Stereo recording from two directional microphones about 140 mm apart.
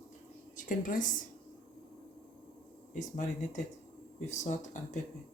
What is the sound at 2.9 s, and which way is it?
Speech, 60° left (ahead or behind).